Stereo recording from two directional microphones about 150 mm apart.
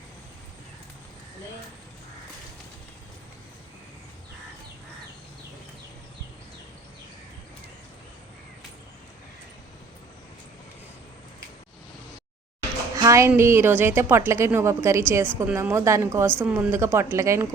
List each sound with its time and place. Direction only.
13.0 s a woman's voice: 20° right (ahead or behind)